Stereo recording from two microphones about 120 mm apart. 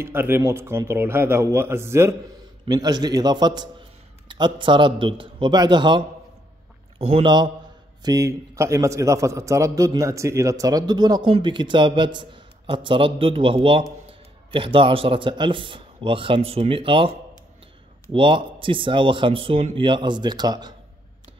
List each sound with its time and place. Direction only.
0.0 s a man's voice: 20° right (ahead or behind)
2.6 s a man's voice: 35° right (ahead or behind)
7.0 s a man's voice: 55° right (ahead or behind)
7.2 s a man's voice: 40° right (ahead or behind)
18.1 s a man's voice: 45° right (ahead or behind)